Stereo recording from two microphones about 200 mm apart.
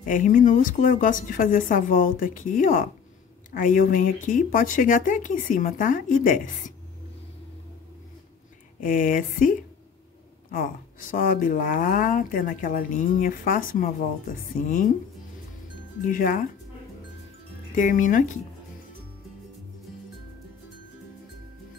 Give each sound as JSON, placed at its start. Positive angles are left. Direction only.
{"t": 0.0, "sound": "speech", "side_deg": 40}
{"t": 8.8, "sound": "speech", "side_deg": 45}
{"t": 16.0, "sound": "speech", "side_deg": 45}
{"t": 17.7, "sound": "speech", "side_deg": 40}